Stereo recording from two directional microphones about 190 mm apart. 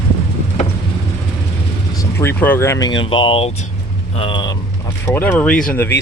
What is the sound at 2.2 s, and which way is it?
Speech, 10° left (ahead or behind).